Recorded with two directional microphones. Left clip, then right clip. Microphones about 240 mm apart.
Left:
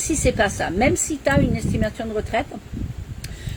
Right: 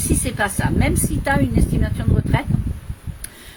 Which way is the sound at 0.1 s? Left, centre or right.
Centre.